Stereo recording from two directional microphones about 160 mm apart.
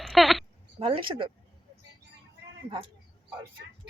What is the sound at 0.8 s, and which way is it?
Speech, 35° right (ahead or behind).